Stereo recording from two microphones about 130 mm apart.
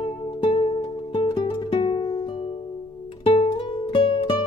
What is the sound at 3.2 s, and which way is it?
Music, 45° left (ahead or behind).